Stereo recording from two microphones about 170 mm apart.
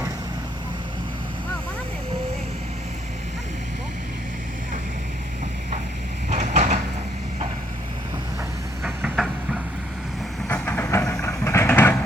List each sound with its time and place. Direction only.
6.3 s a sound: 45° right (ahead or behind)
8.8 s train: 5° right (ahead or behind)
10.5 s train: 10° left (ahead or behind)